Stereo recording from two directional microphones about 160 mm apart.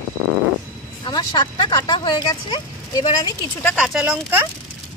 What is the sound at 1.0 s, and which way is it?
Speech, 25° left (ahead or behind).